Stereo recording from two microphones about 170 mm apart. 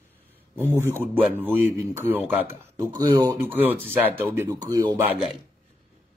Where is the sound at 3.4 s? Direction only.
10° right (ahead or behind).